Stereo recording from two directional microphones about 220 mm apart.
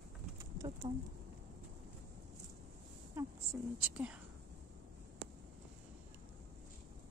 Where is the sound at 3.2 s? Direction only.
10° right (ahead or behind).